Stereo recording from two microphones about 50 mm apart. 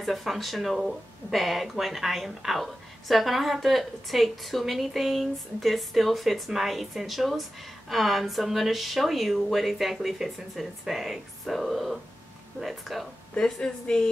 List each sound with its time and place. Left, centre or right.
0.0 s speech: centre
13.4 s a woman's voice: centre